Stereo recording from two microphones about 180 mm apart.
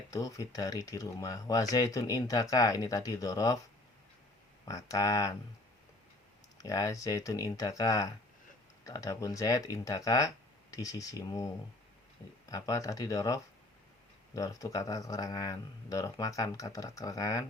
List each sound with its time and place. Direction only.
0.1 s speech: 20° left (ahead or behind)
4.6 s speech: 20° left (ahead or behind)
6.6 s speech: 20° left (ahead or behind)